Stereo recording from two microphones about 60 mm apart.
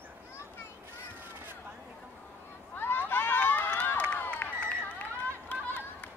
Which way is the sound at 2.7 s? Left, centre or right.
Left.